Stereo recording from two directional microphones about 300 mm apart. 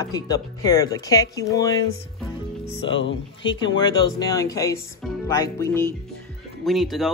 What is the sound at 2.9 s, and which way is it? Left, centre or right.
Speech, left.